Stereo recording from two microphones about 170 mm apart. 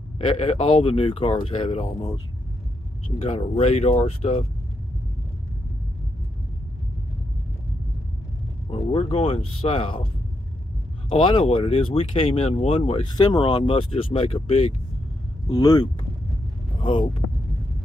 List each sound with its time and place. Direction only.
0.2 s speech: 40° left (ahead or behind)
3.2 s speech: 35° left (ahead or behind)
8.6 s speech: 35° left (ahead or behind)
11.1 s speech: 30° left (ahead or behind)
15.4 s speech: 25° left (ahead or behind)